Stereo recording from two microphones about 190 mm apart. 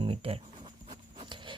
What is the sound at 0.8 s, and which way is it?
Writing, 25° right (ahead or behind).